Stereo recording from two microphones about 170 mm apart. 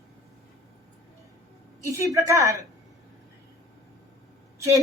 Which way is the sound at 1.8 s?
20° right (ahead or behind).